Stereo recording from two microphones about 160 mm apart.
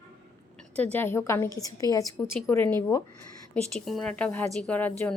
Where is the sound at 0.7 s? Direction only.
10° left (ahead or behind).